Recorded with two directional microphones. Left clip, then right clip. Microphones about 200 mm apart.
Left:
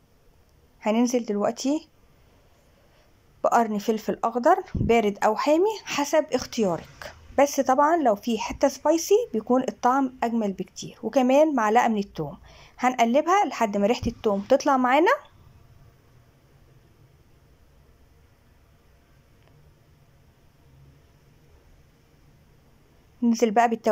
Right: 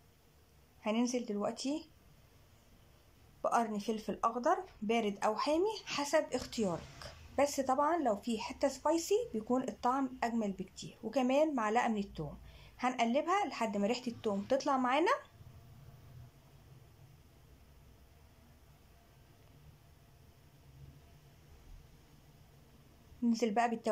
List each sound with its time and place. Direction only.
0.7 s speech: 20° left (ahead or behind)
3.4 s a woman's voice: 20° left (ahead or behind)
23.2 s a woman's voice: 15° left (ahead or behind)